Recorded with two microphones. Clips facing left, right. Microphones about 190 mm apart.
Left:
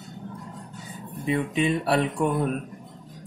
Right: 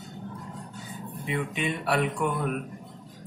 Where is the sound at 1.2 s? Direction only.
35° left (ahead or behind).